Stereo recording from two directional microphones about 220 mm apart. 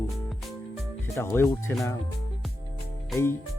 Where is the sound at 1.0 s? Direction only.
10° left (ahead or behind).